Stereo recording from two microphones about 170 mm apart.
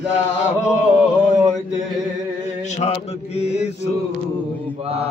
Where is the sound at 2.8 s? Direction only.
40° left (ahead or behind).